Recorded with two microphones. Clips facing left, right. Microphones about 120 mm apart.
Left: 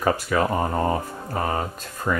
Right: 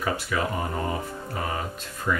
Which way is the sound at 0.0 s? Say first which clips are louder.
Left 5 dB; 45° left (ahead or behind).